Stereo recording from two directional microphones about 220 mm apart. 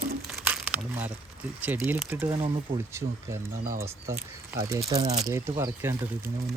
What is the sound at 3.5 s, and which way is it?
Speech, 35° right (ahead or behind).